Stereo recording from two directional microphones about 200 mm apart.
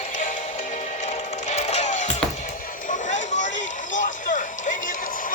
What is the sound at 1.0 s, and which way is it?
Music, 35° left (ahead or behind).